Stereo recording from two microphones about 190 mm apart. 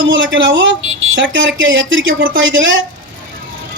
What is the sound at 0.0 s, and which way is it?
A woman's voice, 75° right (ahead or behind).